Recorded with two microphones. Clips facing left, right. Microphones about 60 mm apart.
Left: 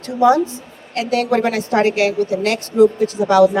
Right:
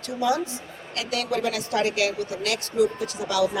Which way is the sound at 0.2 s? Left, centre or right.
Left.